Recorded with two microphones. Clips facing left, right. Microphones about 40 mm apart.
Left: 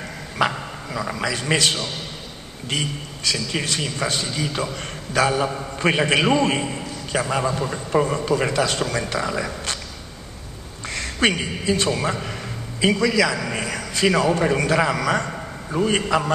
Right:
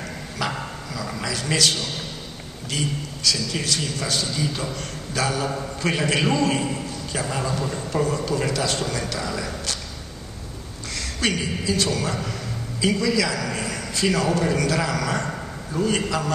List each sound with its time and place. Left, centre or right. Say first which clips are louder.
0.4 s a man's voice: left 6 dB; left
4.4 s a man's voice: left 2 dB; centre
5.1 s a man's voice: left 5 dB; left
7.1 s a man's voice: left 6 dB; centre
7.3 s speech: left 3 dB; left
11.0 s a man's voice: left 4 dB; left
12.9 s a man's voice: left 3 dB; centre
13.3 s a man's voice: left 2 dB; left
13.7 s a sound: left 4 dB; centre
14.3 s a man's voice: left 3 dB; left